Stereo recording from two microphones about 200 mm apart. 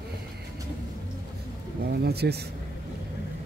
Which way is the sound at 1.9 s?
55° right (ahead or behind).